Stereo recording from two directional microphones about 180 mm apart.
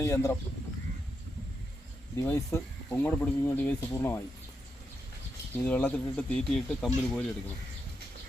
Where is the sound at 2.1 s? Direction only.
15° left (ahead or behind).